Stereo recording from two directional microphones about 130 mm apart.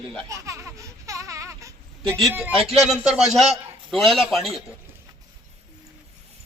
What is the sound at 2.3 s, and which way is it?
Speech, 10° right (ahead or behind).